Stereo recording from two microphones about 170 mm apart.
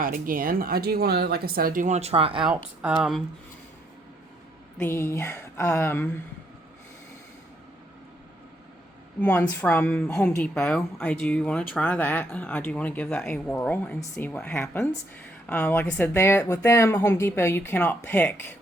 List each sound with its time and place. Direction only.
0.0 s speech: 55° right (ahead or behind); by 2.4 s 35° right (ahead or behind)
2.8 s speech: 5° right (ahead or behind)
4.8 s speech: 15° left (ahead or behind)
9.2 s speech: 10° left (ahead or behind)